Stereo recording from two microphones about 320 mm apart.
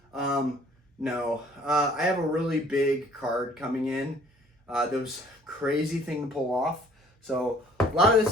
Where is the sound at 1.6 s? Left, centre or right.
Centre.